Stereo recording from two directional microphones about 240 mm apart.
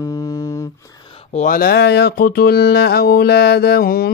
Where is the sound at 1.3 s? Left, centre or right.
Left.